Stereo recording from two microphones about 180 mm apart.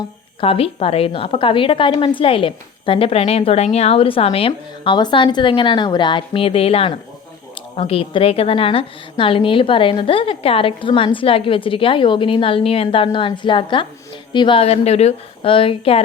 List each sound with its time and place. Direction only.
0.3 s a woman's voice: 30° left (ahead or behind)